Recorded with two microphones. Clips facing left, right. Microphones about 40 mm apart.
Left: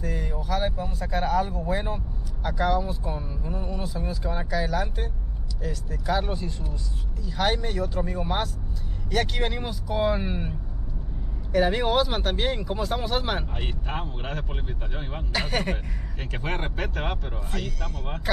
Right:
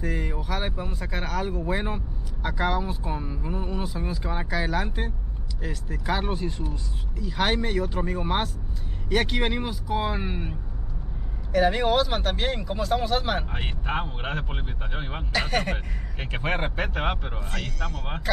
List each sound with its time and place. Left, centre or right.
0.0 s a sound: right
1.7 s speech: right
9.6 s speech: centre
11.5 s speech: centre
13.5 s speech: right
15.3 s speech: centre
15.7 s speech: right
17.5 s speech: centre